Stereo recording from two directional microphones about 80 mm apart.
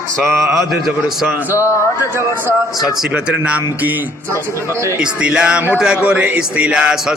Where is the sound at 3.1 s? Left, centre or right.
Centre.